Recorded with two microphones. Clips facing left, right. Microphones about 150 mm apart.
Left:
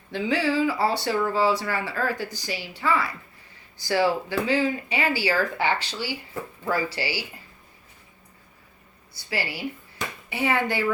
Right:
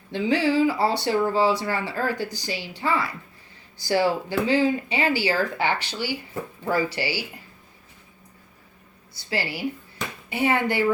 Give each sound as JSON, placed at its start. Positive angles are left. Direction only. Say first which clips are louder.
{"t": 0.1, "sound": "speech", "louder": "right 2 dB", "side_deg": -25}
{"t": 10.3, "sound": "speech", "louder": "right 2 dB", "side_deg": -25}